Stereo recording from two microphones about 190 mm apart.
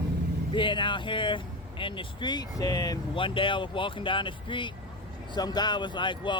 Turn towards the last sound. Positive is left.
turn(degrees=25)  # may be behind; listen again after turning